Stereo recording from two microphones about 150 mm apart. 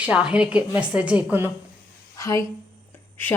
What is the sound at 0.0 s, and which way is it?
A woman's voice, 5° right (ahead or behind).